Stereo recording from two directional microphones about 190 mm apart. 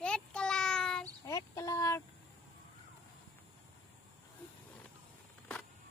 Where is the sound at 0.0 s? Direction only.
5° left (ahead or behind).